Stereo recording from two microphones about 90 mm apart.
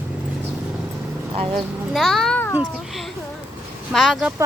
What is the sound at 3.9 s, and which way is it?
Speech, centre (ahead or behind).